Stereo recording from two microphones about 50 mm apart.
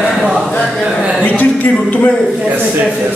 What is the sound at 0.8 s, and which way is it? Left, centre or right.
Speech, centre.